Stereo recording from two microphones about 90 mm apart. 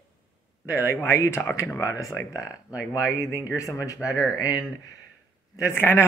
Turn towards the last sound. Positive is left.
turn(degrees=25)  # may be behind; listen again after turning